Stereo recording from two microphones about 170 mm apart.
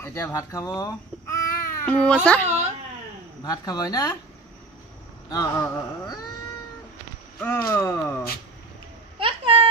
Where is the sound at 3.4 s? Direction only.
20° left (ahead or behind).